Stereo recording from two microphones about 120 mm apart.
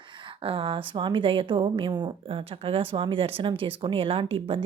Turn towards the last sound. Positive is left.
turn(degrees=-50)  # may be behind; listen again after turning